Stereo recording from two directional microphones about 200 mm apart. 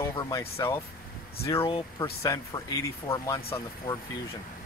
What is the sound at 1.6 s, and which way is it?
Speech, 30° left (ahead or behind).